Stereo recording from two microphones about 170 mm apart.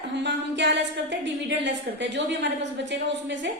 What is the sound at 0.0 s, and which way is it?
A woman's voice, 90° right.